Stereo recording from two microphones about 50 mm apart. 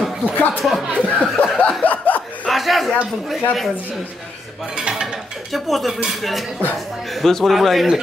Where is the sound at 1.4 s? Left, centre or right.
Left.